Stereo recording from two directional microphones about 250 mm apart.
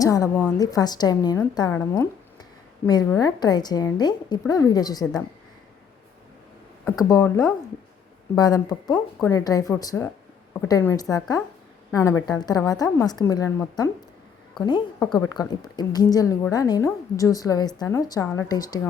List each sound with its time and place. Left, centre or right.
0.0 s a woman's voice: centre
6.9 s a woman's voice: centre